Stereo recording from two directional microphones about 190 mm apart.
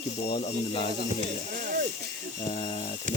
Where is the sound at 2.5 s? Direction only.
30° left (ahead or behind).